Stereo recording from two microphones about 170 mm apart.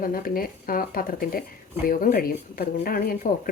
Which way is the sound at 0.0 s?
55° left (ahead or behind).